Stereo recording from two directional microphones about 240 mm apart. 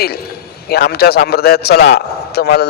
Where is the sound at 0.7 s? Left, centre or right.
Left.